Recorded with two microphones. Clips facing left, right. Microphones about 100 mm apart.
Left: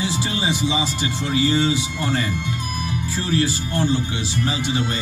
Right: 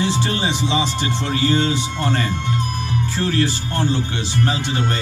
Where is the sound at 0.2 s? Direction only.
60° right (ahead or behind).